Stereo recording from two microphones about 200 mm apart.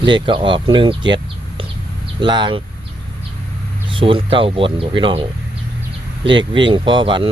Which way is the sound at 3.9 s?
25° right (ahead or behind).